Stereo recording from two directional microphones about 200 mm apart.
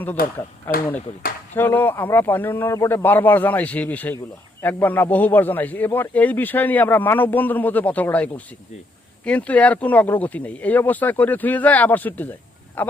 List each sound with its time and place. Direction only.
0.2 s speech: 45° left (ahead or behind)
0.7 s a man's voice: 10° left (ahead or behind)